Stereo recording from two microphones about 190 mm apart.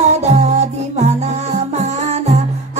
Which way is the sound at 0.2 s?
35° right (ahead or behind).